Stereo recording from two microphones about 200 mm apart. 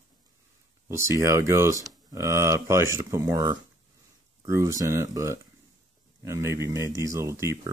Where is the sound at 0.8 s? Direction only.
15° right (ahead or behind).